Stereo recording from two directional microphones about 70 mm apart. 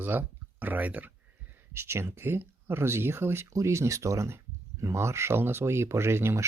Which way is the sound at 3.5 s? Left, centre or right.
Right.